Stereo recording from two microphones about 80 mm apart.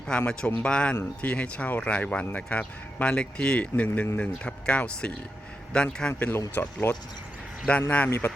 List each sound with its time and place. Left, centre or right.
0.2 s speech: centre
6.6 s speech: left
7.7 s speech: centre